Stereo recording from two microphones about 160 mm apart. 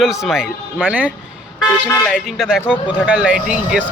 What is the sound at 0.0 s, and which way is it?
Speech, centre (ahead or behind).